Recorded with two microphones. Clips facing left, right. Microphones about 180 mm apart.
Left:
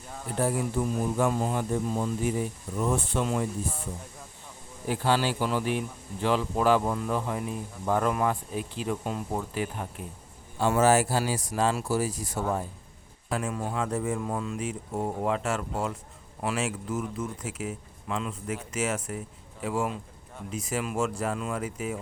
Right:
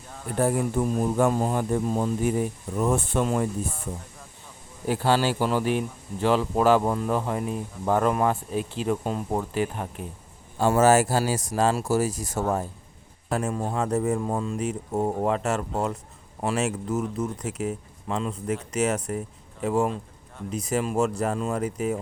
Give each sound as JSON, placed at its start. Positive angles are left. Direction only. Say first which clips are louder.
{"t": 0.3, "sound": "speech", "louder": "right 4 dB", "side_deg": -50}
{"t": 4.9, "sound": "speech", "louder": "right 3 dB", "side_deg": -35}
{"t": 5.4, "sound": "speech", "louder": "right 4 dB", "side_deg": -45}